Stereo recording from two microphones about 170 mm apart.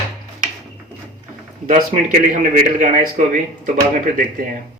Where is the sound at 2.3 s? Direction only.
50° right (ahead or behind).